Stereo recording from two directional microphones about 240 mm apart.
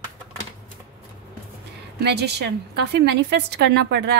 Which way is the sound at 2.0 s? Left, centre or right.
Right.